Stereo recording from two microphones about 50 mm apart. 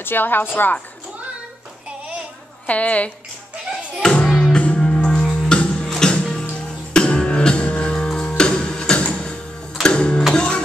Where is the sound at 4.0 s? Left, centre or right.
Centre.